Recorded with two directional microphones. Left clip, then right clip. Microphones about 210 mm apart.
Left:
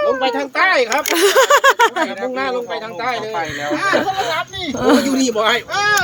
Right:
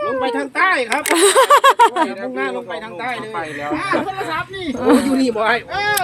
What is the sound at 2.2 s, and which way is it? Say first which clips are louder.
Speech: left 3 dB; 35° left (ahead or behind).